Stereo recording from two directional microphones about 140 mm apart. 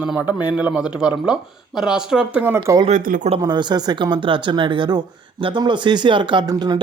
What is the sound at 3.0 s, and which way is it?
Speech, 80° right.